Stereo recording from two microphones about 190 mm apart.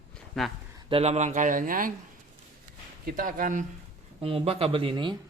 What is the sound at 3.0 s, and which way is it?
Speech, 45° right (ahead or behind).